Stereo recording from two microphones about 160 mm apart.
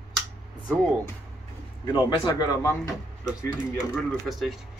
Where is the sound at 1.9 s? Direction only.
30° left (ahead or behind).